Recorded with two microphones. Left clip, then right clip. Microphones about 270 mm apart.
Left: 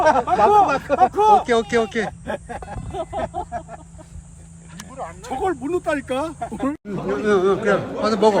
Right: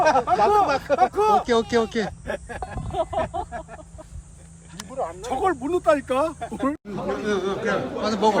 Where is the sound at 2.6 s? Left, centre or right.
Right.